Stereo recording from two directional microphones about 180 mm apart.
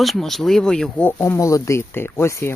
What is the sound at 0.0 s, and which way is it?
Speech, centre (ahead or behind).